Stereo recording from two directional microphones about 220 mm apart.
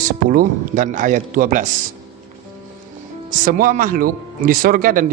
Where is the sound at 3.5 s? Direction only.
40° right (ahead or behind).